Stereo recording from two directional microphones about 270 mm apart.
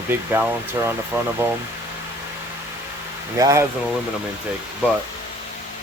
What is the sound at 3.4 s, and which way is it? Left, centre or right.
Speech, centre.